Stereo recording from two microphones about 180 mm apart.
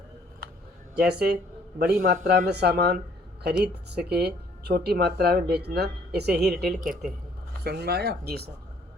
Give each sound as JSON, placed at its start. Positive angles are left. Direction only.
{"t": 0.9, "sound": "speech", "side_deg": -65}